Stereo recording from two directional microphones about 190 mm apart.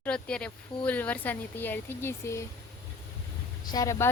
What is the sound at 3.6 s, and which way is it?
Speech, 20° left (ahead or behind).